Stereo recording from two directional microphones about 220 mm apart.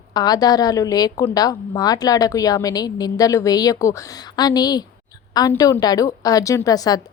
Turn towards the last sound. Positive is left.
turn(degrees=15)  # may be behind; listen again after turning